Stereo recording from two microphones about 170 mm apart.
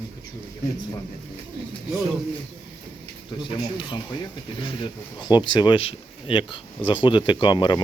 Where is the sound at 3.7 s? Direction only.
30° left (ahead or behind).